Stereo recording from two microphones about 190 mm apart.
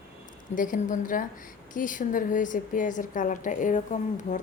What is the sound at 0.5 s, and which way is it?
A woman's voice, 45° left (ahead or behind).